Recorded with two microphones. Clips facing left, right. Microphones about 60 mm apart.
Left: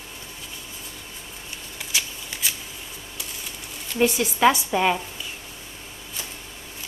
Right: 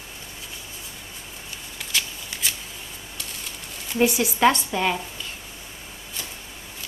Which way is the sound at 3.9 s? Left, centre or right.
Centre.